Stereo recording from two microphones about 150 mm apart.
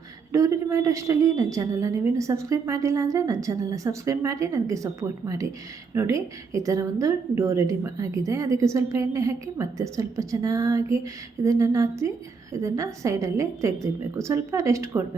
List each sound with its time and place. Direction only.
0.3 s a woman's voice: 20° right (ahead or behind)